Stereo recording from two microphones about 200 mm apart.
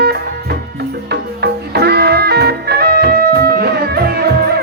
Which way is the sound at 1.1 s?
55° right (ahead or behind).